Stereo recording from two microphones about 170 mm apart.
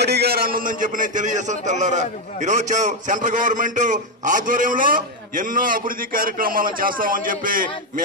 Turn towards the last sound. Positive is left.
turn(degrees=-55)  # may be behind; listen again after turning